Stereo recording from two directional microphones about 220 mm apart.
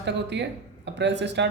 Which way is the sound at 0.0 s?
50° right (ahead or behind).